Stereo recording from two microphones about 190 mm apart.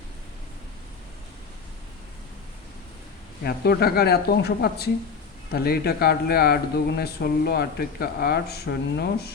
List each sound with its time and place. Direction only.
3.4 s speech: 55° left (ahead or behind)